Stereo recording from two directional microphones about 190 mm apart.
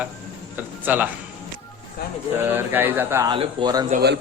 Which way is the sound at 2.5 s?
10° right (ahead or behind).